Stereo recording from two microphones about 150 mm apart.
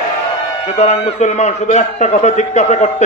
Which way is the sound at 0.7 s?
50° left (ahead or behind).